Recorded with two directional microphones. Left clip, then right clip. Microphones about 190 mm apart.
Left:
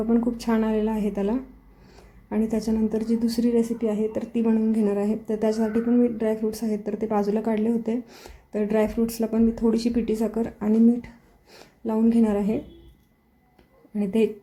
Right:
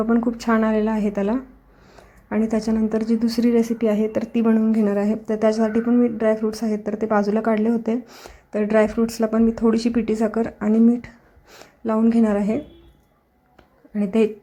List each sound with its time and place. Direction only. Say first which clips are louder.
0.2 s speech: right 4 dB; 5° right (ahead or behind)
13.9 s speech: right 3 dB; 5° right (ahead or behind)